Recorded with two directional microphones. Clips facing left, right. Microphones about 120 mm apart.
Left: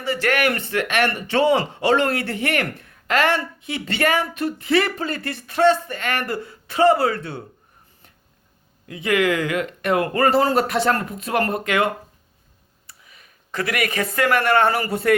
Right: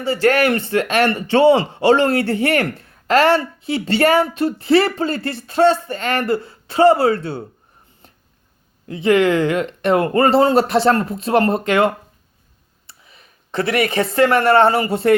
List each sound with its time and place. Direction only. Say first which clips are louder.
0.0 s speech: right 5 dB; 30° right (ahead or behind)
8.9 s speech: right 5 dB; 30° right (ahead or behind)
12.9 s speech: right 2 dB; 30° right (ahead or behind)